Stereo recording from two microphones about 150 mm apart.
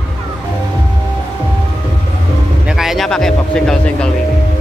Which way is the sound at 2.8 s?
Centre (ahead or behind).